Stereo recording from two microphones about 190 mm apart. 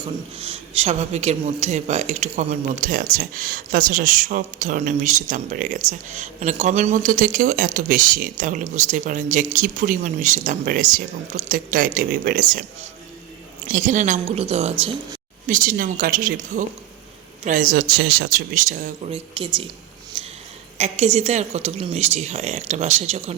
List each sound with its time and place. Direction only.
0.3 s a woman's voice: 30° right (ahead or behind)
15.4 s speech: 45° right (ahead or behind)
19.1 s speech: 25° right (ahead or behind)
20.1 s a sound: 25° right (ahead or behind)
20.7 s a woman's voice: 35° right (ahead or behind)